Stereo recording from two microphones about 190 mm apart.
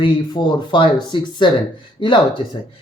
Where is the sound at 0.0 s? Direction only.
25° left (ahead or behind).